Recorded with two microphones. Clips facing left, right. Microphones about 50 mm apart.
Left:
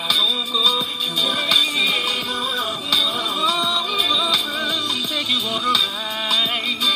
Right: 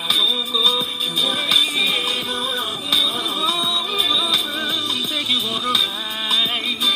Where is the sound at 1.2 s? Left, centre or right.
Right.